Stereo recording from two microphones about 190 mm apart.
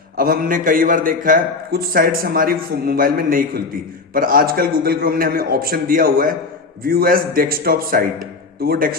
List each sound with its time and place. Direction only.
0.2 s a man's voice: 50° right (ahead or behind)